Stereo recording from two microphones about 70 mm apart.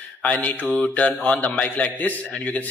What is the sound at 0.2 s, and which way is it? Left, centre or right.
A man's voice, left.